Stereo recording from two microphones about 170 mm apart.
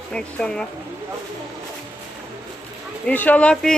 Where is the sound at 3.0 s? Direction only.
10° left (ahead or behind).